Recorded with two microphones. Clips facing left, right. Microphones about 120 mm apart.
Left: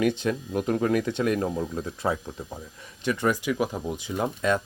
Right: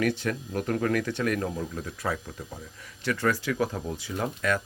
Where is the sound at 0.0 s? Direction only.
20° left (ahead or behind).